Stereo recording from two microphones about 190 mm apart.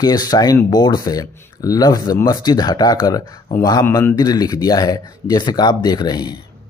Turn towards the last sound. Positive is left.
turn(degrees=20)  # may be behind; listen again after turning